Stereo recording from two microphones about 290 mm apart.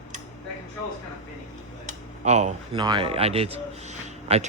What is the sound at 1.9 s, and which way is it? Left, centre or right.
Speech, right.